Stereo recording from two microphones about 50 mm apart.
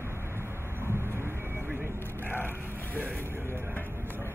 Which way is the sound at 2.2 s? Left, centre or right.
Left.